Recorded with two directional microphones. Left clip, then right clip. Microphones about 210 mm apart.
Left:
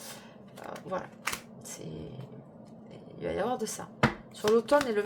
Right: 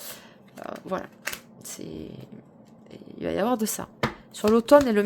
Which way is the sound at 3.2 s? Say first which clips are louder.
Right 6 dB; 55° right (ahead or behind).